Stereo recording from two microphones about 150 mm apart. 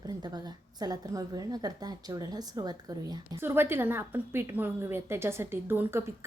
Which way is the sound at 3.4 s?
15° right (ahead or behind).